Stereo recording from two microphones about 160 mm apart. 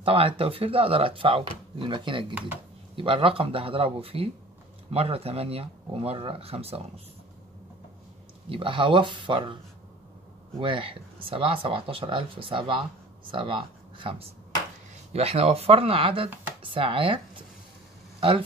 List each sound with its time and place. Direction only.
0.0 s speech: 35° right (ahead or behind)
8.5 s speech: 30° right (ahead or behind)
10.6 s speech: 35° right (ahead or behind)